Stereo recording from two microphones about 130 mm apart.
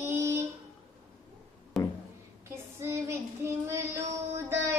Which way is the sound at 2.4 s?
20° right (ahead or behind).